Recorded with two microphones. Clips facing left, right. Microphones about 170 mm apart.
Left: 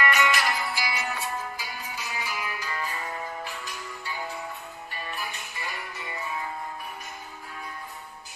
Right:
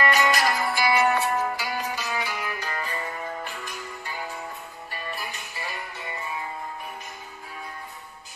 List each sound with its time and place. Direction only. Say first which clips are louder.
0.0 s music: right 3 dB; 35° right (ahead or behind); by 2.8 s 65° right (ahead or behind)